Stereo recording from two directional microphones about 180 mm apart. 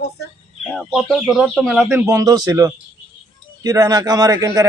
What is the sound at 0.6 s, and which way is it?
A man's voice, centre (ahead or behind).